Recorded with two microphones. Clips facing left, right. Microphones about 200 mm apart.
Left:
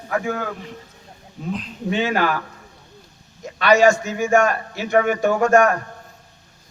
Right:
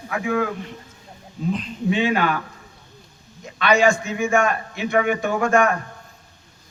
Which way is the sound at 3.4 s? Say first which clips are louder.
Left 3 dB; 40° left (ahead or behind).